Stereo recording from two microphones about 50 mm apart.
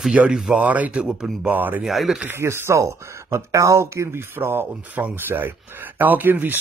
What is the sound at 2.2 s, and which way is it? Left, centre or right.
Speech, right.